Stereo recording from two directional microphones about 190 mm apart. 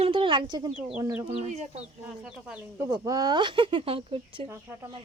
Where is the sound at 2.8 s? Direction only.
20° right (ahead or behind).